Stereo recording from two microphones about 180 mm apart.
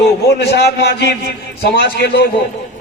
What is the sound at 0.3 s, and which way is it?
A man's voice, 70° left (ahead or behind).